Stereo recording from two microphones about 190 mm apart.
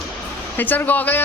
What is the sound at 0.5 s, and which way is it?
Speech, 10° left (ahead or behind).